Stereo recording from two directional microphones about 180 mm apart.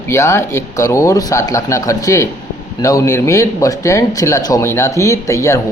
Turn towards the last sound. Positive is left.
turn(degrees=15)  # may be behind; listen again after turning